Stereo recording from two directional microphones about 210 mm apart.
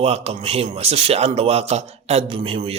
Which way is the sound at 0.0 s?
30° right (ahead or behind).